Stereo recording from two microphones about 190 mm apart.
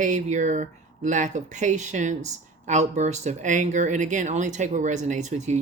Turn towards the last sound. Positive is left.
turn(degrees=-40)  # may be behind; listen again after turning